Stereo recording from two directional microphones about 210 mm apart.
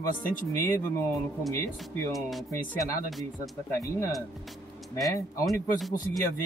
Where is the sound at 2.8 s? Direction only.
Centre (ahead or behind).